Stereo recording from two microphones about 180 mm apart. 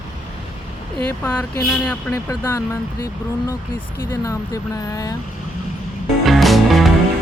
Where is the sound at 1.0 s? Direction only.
10° left (ahead or behind).